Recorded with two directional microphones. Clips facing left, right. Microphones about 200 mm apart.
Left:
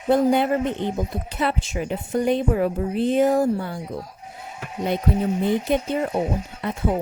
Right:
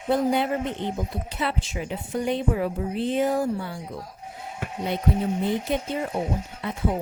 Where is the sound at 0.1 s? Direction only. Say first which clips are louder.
Left 4 dB; 50° left (ahead or behind).